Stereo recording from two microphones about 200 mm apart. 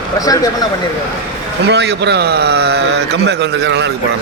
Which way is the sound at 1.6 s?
55° right (ahead or behind).